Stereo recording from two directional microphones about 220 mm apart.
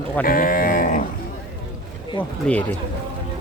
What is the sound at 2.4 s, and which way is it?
Speech, 5° left (ahead or behind).